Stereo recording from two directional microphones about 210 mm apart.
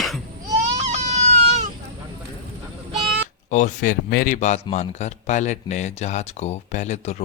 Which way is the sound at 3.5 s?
35° left (ahead or behind).